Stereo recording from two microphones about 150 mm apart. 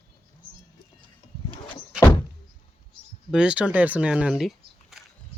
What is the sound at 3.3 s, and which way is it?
Speech, 5° right (ahead or behind).